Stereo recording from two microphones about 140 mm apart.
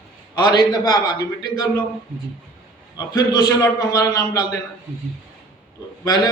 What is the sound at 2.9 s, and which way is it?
Speech, 30° left (ahead or behind).